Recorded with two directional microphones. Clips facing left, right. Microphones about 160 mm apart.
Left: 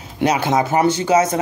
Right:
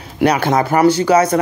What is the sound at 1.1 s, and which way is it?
Speech, 20° left (ahead or behind).